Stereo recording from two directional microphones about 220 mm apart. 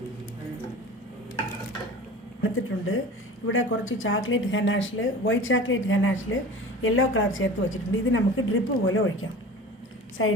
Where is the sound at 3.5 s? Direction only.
65° left (ahead or behind).